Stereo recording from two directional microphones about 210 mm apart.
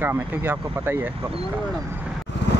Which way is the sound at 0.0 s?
10° right (ahead or behind).